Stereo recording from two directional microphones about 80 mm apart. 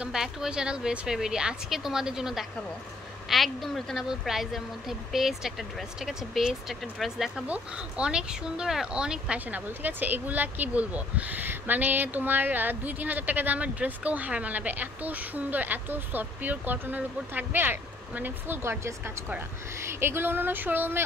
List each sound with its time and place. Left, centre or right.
0.0 s a woman's voice: centre
7.4 s speech: centre